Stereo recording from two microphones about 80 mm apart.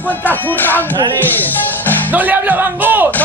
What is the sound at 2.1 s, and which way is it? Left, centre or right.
Speech, right.